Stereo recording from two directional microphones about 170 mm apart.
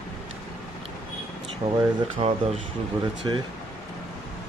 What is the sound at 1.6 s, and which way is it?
Speech, 35° right (ahead or behind).